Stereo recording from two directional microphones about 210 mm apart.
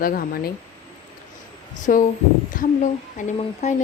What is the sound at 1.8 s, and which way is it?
A woman's voice, 40° left (ahead or behind).